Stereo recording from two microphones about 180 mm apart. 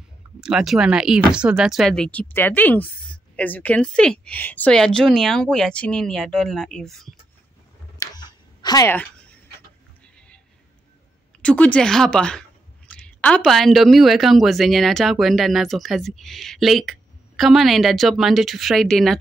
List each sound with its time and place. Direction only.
0.4 s speech: 5° right (ahead or behind)
8.0 s a sound: 25° left (ahead or behind)
11.4 s speech: 5° left (ahead or behind)